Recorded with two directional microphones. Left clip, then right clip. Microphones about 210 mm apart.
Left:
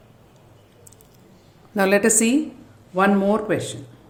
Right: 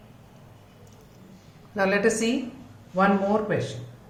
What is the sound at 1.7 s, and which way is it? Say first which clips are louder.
A woman's voice: left 5 dB; 55° left (ahead or behind).